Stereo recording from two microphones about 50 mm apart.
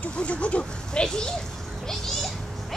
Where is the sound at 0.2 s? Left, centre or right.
Left.